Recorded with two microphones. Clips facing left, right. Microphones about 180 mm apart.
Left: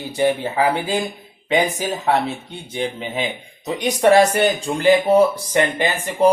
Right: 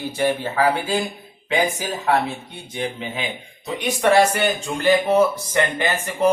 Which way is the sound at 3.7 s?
40° left (ahead or behind).